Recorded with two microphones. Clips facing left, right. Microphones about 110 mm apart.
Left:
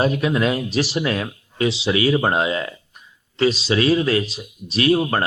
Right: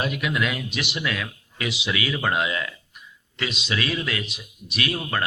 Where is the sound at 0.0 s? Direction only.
35° left (ahead or behind).